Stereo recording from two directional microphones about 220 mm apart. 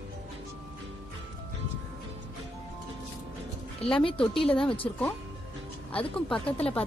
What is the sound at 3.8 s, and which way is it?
Speech, 25° left (ahead or behind).